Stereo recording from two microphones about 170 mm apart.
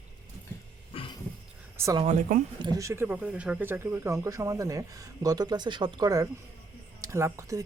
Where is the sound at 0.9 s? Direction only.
35° left (ahead or behind).